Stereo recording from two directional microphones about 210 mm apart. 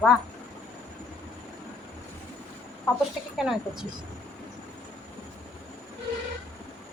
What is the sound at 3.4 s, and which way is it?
Speech, centre (ahead or behind).